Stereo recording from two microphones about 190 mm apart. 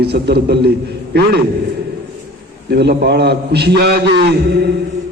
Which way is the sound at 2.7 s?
55° right (ahead or behind).